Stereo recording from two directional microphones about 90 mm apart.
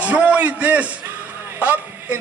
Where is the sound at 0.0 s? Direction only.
15° right (ahead or behind).